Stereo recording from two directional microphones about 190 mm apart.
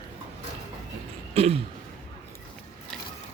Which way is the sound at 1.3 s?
30° right (ahead or behind).